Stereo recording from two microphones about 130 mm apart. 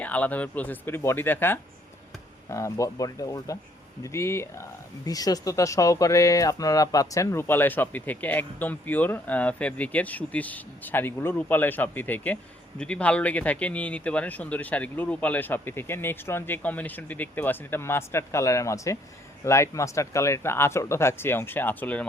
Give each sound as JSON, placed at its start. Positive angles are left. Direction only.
{"t": 0.0, "sound": "speech", "side_deg": 10}